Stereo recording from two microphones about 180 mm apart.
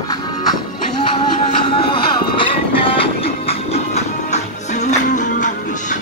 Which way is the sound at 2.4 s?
30° left (ahead or behind).